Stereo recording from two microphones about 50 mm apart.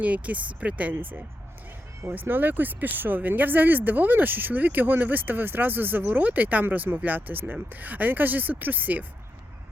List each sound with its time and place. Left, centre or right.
0.0 s speech: right
2.1 s speech: right